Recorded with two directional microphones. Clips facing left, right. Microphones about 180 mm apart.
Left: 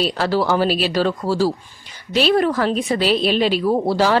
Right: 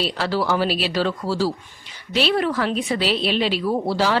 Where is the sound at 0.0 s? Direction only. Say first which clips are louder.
Left 4 dB; 45° left (ahead or behind).